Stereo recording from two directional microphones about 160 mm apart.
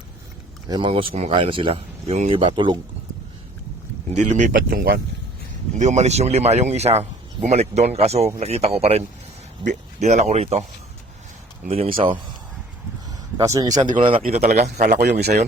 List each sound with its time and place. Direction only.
0.7 s speech: 30° right (ahead or behind)
4.1 s speech: 50° right (ahead or behind)
5.7 s speech: 45° right (ahead or behind)
11.7 s speech: 35° right (ahead or behind)
13.1 s a sound: 20° right (ahead or behind)
14.2 s speech: 45° right (ahead or behind)
14.9 s speech: 90° right